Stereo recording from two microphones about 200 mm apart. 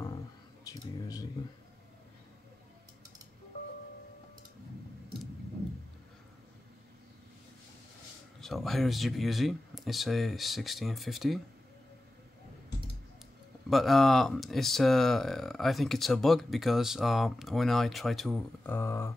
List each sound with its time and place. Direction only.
0.7 s speech: 15° left (ahead or behind)
8.4 s speech: centre (ahead or behind)
13.7 s speech: centre (ahead or behind)
18.7 s beatboxing: 15° left (ahead or behind)